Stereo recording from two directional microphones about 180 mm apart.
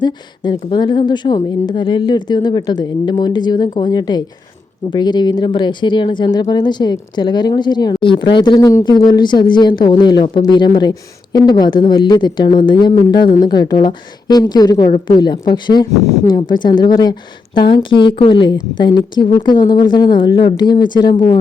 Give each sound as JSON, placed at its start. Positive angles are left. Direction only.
{"t": 0.0, "sound": "a woman's voice", "side_deg": 25}